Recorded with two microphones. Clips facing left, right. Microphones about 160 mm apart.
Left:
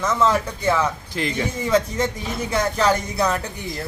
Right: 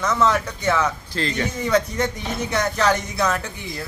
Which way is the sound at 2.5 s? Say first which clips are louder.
Left 1 dB; 10° left (ahead or behind).